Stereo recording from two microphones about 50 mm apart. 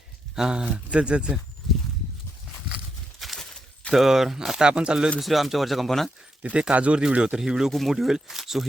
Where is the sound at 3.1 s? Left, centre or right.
Centre.